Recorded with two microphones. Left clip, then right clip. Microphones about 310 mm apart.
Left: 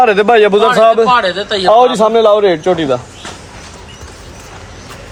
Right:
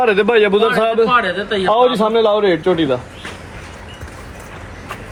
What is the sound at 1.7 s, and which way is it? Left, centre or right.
A man's voice, left.